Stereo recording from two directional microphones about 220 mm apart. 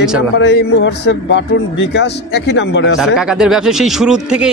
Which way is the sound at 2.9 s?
Centre (ahead or behind).